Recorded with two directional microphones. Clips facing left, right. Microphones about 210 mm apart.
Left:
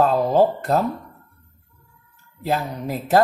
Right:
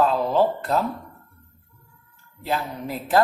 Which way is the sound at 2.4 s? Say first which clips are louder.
Left 3 dB; 45° left (ahead or behind).